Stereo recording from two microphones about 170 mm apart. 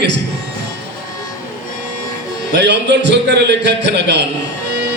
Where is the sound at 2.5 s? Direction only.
90° right.